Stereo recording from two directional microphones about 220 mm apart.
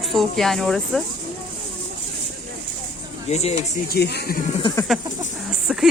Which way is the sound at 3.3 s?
30° left (ahead or behind).